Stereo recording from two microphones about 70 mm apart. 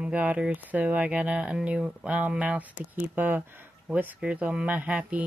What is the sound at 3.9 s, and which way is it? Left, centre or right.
Speech, centre.